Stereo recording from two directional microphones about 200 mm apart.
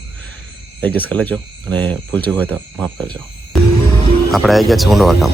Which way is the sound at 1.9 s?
25° right (ahead or behind).